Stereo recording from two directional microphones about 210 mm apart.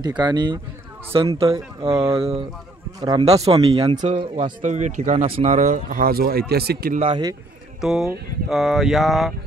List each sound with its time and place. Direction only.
0.2 s speech: 20° right (ahead or behind); by 7.0 s 45° right (ahead or behind)
7.0 s speech: 20° right (ahead or behind)
7.8 s a sound: centre (ahead or behind)